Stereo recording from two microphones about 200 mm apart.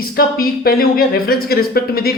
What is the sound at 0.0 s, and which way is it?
A woman's voice, 50° left (ahead or behind).